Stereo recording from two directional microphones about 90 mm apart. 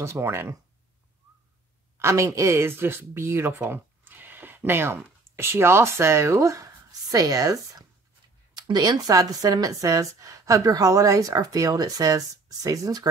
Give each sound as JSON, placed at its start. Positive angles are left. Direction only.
{"t": 0.0, "sound": "speech", "side_deg": -30}
{"t": 2.0, "sound": "speech", "side_deg": -30}
{"t": 8.5, "sound": "speech", "side_deg": -55}